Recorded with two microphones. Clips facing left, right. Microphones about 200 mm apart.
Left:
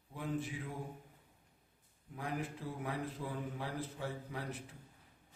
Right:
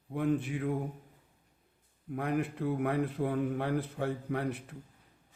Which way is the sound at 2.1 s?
60° right (ahead or behind).